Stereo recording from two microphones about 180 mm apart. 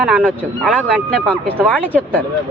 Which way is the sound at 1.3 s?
5° left (ahead or behind).